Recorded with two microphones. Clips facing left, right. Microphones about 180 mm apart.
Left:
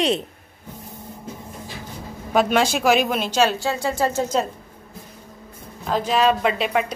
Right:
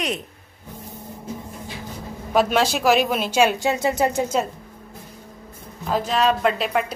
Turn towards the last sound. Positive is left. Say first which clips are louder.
# even
turn(degrees=0)  # may be behind; listen again after turning